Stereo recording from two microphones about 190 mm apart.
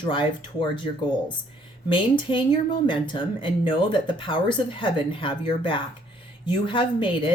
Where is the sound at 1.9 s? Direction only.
25° left (ahead or behind).